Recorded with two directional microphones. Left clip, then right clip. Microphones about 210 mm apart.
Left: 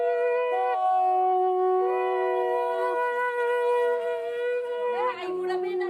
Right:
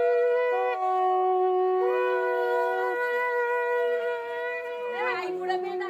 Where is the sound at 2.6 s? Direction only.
20° left (ahead or behind); by 5.2 s 50° left (ahead or behind).